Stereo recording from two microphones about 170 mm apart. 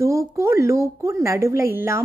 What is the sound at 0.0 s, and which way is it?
A woman's voice, 15° right (ahead or behind).